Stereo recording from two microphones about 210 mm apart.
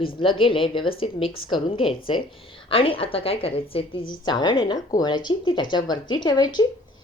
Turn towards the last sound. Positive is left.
turn(degrees=20)  # may be behind; listen again after turning